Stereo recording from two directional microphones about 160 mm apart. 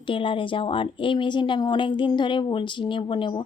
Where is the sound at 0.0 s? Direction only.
35° left (ahead or behind).